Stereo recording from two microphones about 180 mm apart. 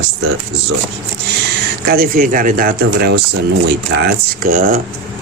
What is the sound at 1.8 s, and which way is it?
Speech, 55° right (ahead or behind).